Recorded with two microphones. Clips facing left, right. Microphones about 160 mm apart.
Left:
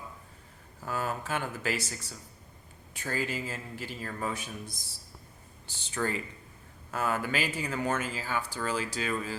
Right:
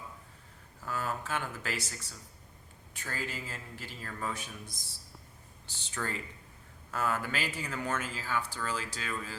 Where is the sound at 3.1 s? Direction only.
10° left (ahead or behind).